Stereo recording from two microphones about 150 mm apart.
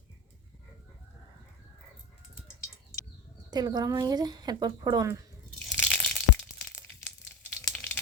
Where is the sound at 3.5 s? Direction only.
25° right (ahead or behind).